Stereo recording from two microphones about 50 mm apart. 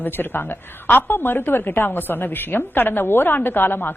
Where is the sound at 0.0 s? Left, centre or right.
Left.